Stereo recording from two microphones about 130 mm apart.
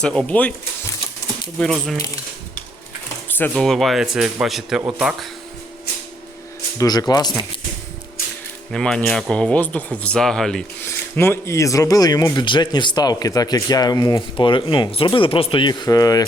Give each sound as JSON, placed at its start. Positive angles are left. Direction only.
{"t": 0.0, "sound": "speech", "side_deg": 5}
{"t": 1.5, "sound": "speech", "side_deg": 5}
{"t": 3.2, "sound": "a sound", "side_deg": 15}
{"t": 3.5, "sound": "speech", "side_deg": 0}
{"t": 6.7, "sound": "speech", "side_deg": 30}
{"t": 8.7, "sound": "speech", "side_deg": 5}
{"t": 10.8, "sound": "speech", "side_deg": 20}